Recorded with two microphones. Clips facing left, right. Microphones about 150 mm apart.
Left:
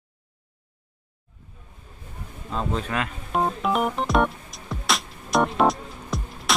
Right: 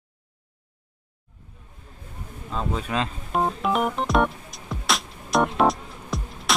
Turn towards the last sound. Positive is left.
turn(degrees=0)  # may be behind; listen again after turning